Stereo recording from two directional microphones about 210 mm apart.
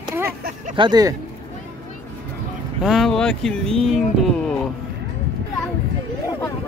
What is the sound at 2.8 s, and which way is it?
Speech, centre (ahead or behind).